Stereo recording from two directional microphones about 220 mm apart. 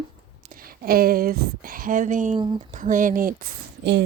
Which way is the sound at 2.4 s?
20° right (ahead or behind).